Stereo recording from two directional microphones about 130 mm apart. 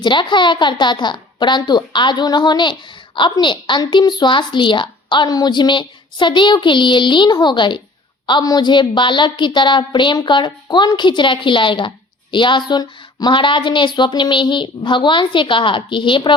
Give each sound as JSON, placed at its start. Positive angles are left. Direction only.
{"t": 0.0, "sound": "a woman's voice", "side_deg": 35}